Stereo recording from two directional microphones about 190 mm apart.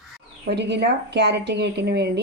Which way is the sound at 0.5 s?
60° right (ahead or behind).